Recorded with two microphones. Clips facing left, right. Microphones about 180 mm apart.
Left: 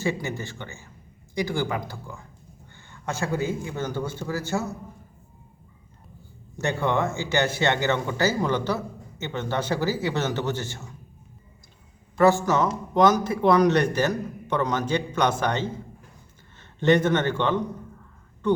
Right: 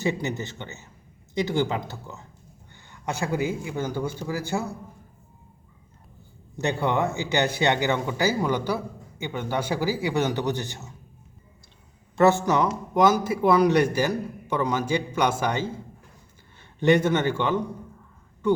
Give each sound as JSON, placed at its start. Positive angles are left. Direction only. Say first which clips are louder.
{"t": 0.0, "sound": "a man's voice", "louder": "right 1 dB", "side_deg": -20}
{"t": 6.6, "sound": "a man's voice", "louder": "even", "side_deg": -15}
{"t": 12.1, "sound": "a man's voice", "louder": "even", "side_deg": -20}
{"t": 16.8, "sound": "a man's voice", "louder": "even", "side_deg": -10}